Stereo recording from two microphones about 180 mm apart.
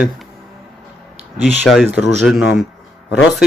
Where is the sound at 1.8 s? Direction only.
5° right (ahead or behind).